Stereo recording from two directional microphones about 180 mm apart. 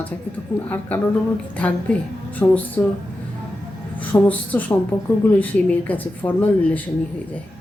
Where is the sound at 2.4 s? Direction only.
10° left (ahead or behind).